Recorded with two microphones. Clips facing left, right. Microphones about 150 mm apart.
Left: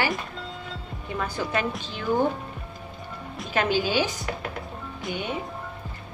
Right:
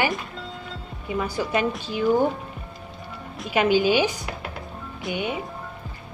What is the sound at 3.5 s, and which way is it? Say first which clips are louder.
Speech: right 4 dB; 15° right (ahead or behind).